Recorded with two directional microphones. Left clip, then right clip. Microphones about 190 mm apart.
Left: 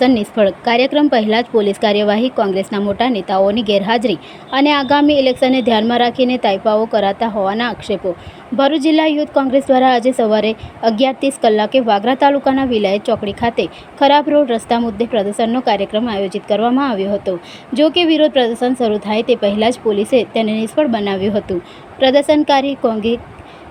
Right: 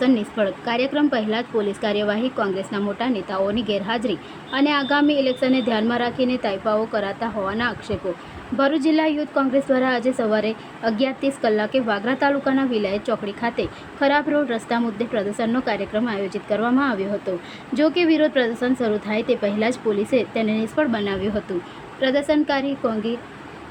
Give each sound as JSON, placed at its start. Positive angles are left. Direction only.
{"t": 0.0, "sound": "a woman's voice", "side_deg": 25}